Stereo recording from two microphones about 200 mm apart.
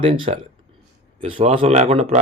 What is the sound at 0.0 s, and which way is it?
Speech, 30° right (ahead or behind).